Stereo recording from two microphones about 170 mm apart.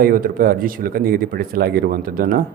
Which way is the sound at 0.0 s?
55° right (ahead or behind).